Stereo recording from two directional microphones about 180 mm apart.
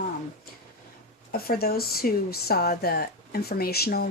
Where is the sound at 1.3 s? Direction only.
55° left (ahead or behind).